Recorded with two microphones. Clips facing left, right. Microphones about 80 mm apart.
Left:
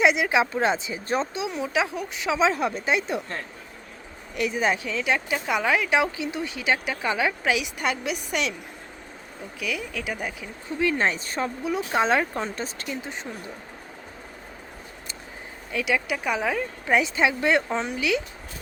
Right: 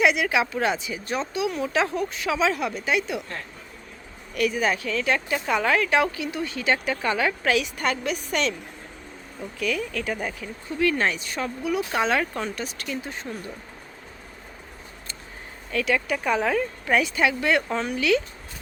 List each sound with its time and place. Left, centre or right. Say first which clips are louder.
0.0 s speech: left 1 dB; left
4.4 s speech: right 1 dB; left
9.6 s speech: right 4 dB; centre
10.8 s speech: right 1 dB; left
15.7 s speech: right 1 dB; centre
16.8 s speech: left 2 dB; left